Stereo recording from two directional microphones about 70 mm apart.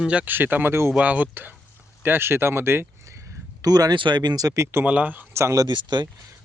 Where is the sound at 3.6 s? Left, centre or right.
Right.